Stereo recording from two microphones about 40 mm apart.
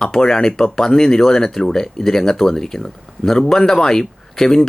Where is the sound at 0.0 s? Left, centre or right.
Centre.